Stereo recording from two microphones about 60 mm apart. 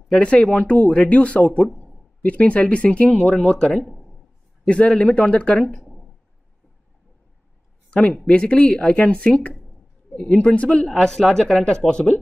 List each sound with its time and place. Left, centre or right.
0.2 s speech: left
3.7 s speech: centre
4.6 s speech: centre
8.3 s speech: centre
10.1 s speech: centre
10.4 s speech: centre